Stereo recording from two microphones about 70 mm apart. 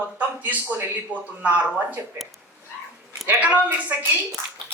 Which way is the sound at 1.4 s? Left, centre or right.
Right.